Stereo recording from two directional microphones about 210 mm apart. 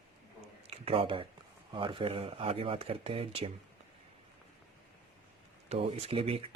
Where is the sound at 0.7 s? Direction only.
25° right (ahead or behind).